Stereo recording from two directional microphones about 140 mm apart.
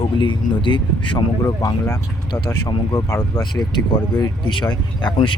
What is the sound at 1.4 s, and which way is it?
Speech, 20° left (ahead or behind).